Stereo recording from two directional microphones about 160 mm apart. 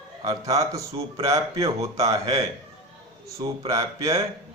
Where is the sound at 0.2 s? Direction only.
25° right (ahead or behind).